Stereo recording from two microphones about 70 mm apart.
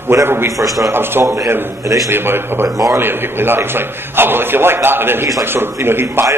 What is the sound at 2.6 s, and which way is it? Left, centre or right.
Speech, right.